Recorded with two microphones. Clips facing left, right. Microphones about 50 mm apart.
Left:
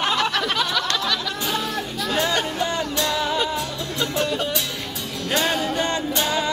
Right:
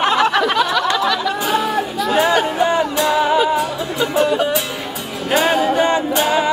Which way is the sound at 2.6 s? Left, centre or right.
Centre.